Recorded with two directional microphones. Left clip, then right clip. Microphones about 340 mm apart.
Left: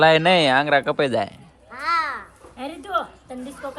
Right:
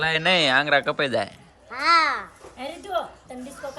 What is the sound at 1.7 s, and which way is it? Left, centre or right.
Babbling, right.